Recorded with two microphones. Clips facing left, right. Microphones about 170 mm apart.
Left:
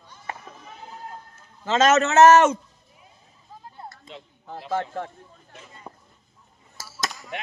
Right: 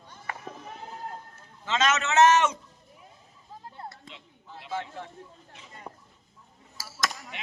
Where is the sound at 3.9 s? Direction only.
45° left (ahead or behind).